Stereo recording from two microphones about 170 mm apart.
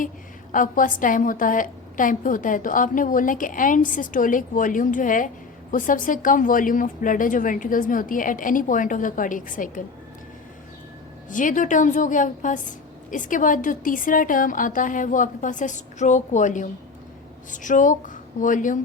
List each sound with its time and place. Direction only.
0.5 s a woman's voice: 50° left (ahead or behind)
11.3 s a woman's voice: 50° left (ahead or behind)